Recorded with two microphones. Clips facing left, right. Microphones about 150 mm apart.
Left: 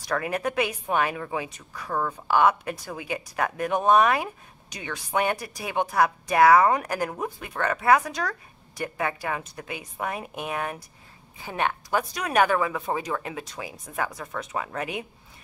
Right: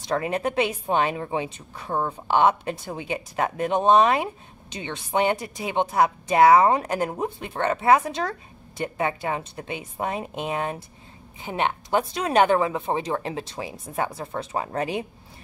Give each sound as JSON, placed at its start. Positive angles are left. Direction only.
{"t": 0.0, "sound": "a woman's voice", "side_deg": -25}